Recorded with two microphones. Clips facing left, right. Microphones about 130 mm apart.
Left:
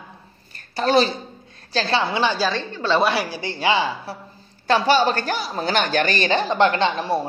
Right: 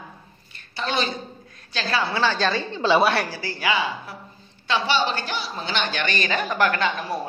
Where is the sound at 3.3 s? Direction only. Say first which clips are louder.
Left 4 dB; 20° left (ahead or behind).